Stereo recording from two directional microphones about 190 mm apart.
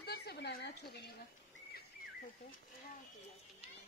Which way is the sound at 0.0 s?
60° left (ahead or behind).